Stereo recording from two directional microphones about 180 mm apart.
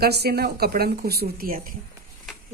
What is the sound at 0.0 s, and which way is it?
Speech, 60° right (ahead or behind).